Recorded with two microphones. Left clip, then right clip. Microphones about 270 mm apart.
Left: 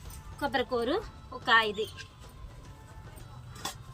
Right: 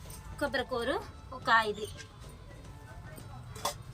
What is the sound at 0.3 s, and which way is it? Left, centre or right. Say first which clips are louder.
Speech: left 3 dB; right.